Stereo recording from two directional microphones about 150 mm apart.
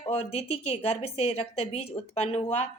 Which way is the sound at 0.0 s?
40° left (ahead or behind).